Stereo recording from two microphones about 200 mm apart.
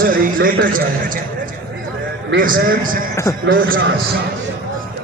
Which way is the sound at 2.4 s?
45° right (ahead or behind).